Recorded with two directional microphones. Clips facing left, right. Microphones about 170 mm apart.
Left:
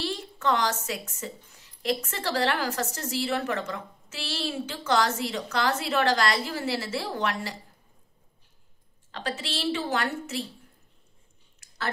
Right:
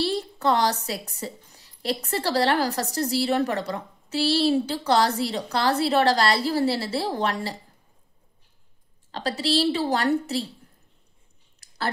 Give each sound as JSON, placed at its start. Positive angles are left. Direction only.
{"t": 0.0, "sound": "a woman's voice", "side_deg": -35}
{"t": 9.1, "sound": "a woman's voice", "side_deg": -35}
{"t": 11.6, "sound": "chewing", "side_deg": -35}